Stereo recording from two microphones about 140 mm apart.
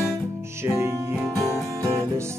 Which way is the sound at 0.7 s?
20° right (ahead or behind).